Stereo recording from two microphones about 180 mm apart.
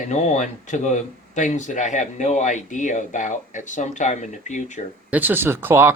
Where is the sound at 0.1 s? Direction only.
40° left (ahead or behind).